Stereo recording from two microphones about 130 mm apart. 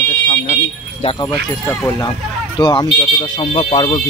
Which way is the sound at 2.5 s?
35° left (ahead or behind).